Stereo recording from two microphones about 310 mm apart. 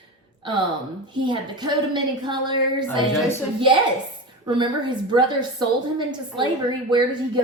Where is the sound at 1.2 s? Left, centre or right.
Centre.